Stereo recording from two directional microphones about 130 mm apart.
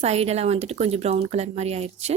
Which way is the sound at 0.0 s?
55° right (ahead or behind).